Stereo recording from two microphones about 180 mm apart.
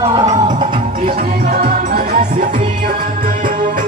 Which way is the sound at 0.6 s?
45° right (ahead or behind).